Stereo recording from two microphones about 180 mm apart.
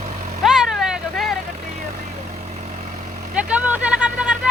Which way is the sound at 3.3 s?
10° right (ahead or behind).